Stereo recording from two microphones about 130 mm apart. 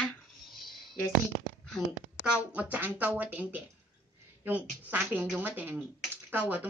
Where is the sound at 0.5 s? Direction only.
35° left (ahead or behind).